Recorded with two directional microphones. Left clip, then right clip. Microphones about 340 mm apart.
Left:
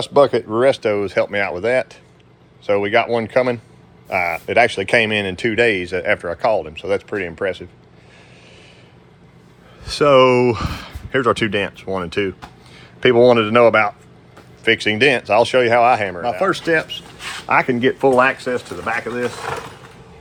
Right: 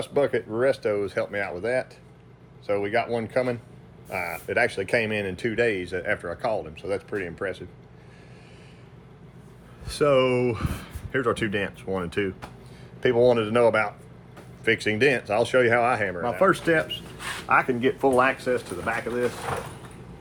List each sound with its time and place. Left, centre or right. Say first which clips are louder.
0.0 s speech: left 10 dB; centre
9.8 s speech: left 9 dB; centre
13.0 s speech: left 8 dB; left; by 17.3 s centre
17.5 s speech: left 6 dB; left